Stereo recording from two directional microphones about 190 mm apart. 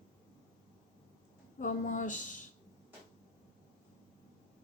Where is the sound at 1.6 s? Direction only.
40° left (ahead or behind).